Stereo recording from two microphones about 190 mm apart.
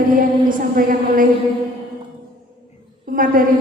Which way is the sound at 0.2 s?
45° right (ahead or behind).